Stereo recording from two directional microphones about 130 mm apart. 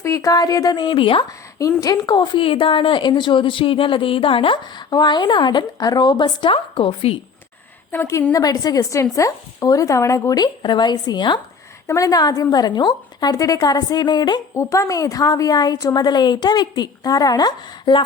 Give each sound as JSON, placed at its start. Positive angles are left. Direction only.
{"t": 0.0, "sound": "a woman's voice", "side_deg": 25}
{"t": 1.5, "sound": "a woman's voice", "side_deg": 25}
{"t": 7.9, "sound": "a woman's voice", "side_deg": 25}
{"t": 14.5, "sound": "a woman's voice", "side_deg": 25}